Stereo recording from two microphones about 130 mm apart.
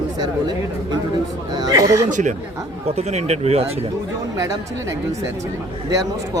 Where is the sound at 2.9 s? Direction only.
55° right (ahead or behind).